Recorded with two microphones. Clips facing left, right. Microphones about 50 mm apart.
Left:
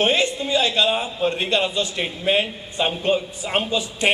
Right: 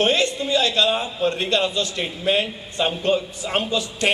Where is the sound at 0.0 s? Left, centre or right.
Centre.